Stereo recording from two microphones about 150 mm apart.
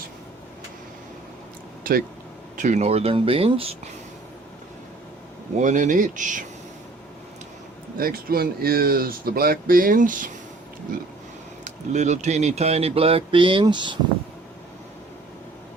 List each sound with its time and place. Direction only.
1.8 s speech: 75° right (ahead or behind)
2.6 s speech: 50° right (ahead or behind)
5.5 s speech: 55° right (ahead or behind)
7.9 s speech: 80° right; by 10.3 s 65° right (ahead or behind)
11.6 s speech: 50° right (ahead or behind); by 14.0 s 30° right (ahead or behind)